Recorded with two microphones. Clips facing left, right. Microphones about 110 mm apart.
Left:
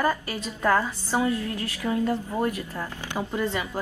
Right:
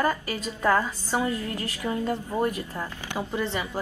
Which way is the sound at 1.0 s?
15° left (ahead or behind).